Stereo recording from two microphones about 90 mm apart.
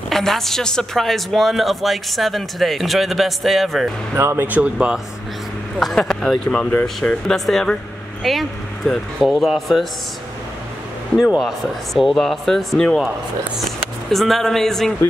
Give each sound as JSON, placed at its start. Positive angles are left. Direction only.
{"t": 0.1, "sound": "speech", "side_deg": 5}
{"t": 4.1, "sound": "speech", "side_deg": -30}
{"t": 4.5, "sound": "speech", "side_deg": -15}
{"t": 5.8, "sound": "speech", "side_deg": 5}
{"t": 11.3, "sound": "speech", "side_deg": 0}
{"t": 14.1, "sound": "speech", "side_deg": 0}